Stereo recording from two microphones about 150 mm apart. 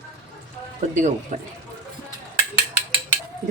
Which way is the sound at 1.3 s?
60° right (ahead or behind).